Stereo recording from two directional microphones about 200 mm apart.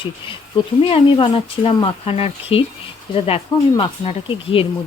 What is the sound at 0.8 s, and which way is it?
Speech, 30° left (ahead or behind).